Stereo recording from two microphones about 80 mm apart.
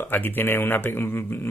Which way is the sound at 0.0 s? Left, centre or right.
Left.